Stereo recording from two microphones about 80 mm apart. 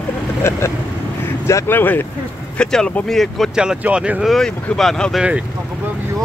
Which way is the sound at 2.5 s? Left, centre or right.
Centre.